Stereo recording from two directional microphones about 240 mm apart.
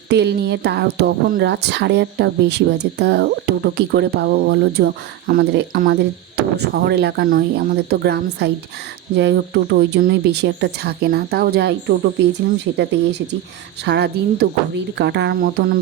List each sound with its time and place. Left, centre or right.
0.1 s speech: right